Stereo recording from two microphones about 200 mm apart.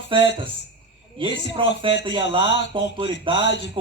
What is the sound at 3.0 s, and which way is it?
Speech, 25° right (ahead or behind).